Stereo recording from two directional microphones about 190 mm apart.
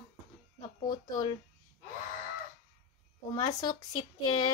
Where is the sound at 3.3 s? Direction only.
20° left (ahead or behind).